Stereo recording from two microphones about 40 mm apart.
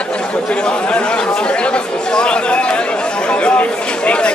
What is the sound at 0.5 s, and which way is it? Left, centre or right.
Speech, left.